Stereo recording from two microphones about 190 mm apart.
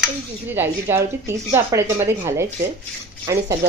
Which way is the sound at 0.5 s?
10° right (ahead or behind).